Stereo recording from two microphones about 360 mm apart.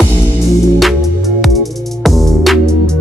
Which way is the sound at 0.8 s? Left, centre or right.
Centre.